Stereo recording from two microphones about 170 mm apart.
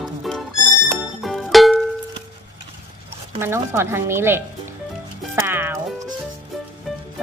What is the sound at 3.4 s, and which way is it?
A woman's voice, 15° right (ahead or behind).